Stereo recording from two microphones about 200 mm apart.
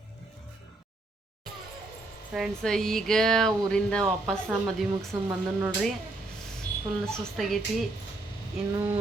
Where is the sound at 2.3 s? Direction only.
Centre (ahead or behind).